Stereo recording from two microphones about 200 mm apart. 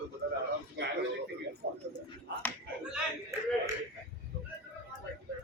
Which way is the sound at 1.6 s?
55° right (ahead or behind).